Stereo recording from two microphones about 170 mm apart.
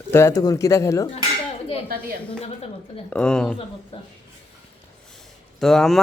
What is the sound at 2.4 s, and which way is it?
Speech, 35° left (ahead or behind).